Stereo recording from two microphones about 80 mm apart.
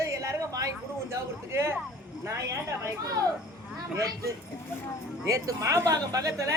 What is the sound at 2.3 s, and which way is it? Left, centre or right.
A woman's voice, right.